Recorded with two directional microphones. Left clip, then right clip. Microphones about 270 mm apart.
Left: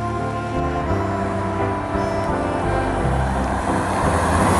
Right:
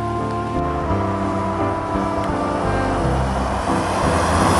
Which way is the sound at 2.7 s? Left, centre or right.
Centre.